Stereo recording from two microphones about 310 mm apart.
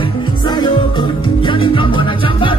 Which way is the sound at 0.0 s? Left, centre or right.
Centre.